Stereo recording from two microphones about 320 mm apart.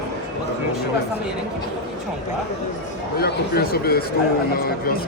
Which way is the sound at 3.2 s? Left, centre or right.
Left.